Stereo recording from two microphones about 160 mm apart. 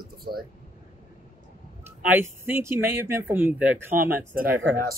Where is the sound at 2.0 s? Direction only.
15° right (ahead or behind).